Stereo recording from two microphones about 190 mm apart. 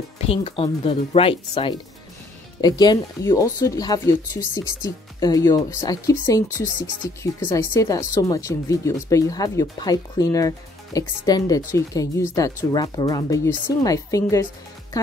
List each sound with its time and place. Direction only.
0.3 s speech: 30° left (ahead or behind)